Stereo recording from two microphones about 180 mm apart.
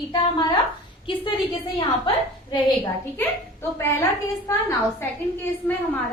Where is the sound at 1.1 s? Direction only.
30° left (ahead or behind).